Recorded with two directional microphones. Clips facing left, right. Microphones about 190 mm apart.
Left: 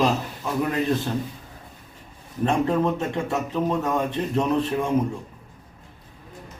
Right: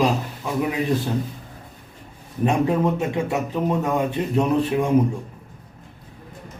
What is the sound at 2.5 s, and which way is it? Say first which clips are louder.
Speech: right 2 dB; 15° right (ahead or behind).